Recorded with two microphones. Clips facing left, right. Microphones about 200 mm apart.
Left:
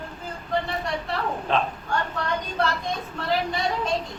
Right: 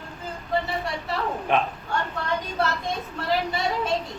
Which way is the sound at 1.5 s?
15° right (ahead or behind).